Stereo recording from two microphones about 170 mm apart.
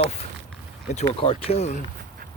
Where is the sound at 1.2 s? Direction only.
35° left (ahead or behind).